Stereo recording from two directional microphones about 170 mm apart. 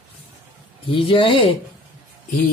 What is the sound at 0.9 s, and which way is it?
Speech, 30° left (ahead or behind).